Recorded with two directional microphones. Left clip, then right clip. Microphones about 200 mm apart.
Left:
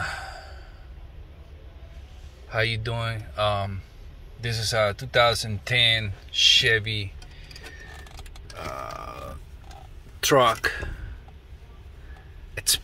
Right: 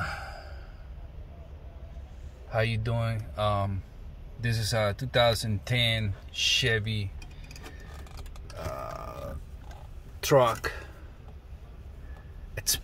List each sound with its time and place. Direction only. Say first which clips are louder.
2.5 s speech: left 4 dB; 15° right (ahead or behind)
8.5 s grunt: left 3 dB; centre (ahead or behind)
10.2 s speech: left 4 dB; centre (ahead or behind)
12.5 s a sound: left 6 dB; 10° right (ahead or behind)